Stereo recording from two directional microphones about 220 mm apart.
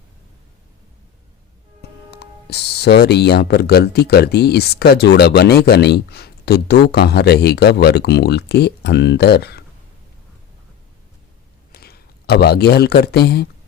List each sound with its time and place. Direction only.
2.0 s speech: 50° left (ahead or behind)
11.7 s speech: 45° left (ahead or behind)